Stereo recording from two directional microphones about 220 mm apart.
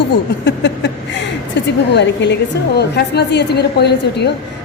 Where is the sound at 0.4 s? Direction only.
50° left (ahead or behind).